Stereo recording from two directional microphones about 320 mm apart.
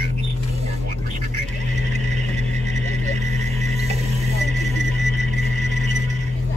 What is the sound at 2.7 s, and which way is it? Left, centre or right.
Vehicle, right.